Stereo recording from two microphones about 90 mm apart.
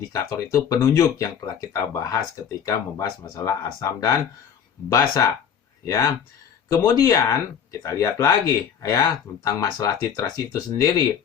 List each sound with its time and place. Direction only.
0.1 s speech: 30° left (ahead or behind)